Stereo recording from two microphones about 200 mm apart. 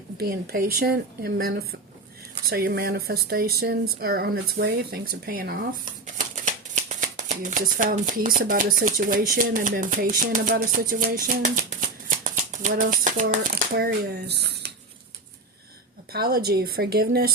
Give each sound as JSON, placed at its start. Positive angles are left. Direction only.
{"t": 0.2, "sound": "a woman's voice", "side_deg": -50}
{"t": 13.5, "sound": "a woman's voice", "side_deg": -50}
{"t": 16.1, "sound": "a woman's voice", "side_deg": -50}